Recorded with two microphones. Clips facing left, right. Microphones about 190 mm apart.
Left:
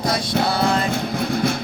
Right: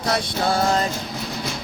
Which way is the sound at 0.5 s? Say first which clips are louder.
Right 3 dB; 40° right (ahead or behind).